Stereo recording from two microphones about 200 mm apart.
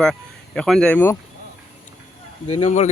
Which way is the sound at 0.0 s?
5° left (ahead or behind).